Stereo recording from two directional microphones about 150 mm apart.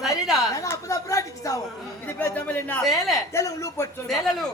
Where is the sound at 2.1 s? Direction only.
10° left (ahead or behind).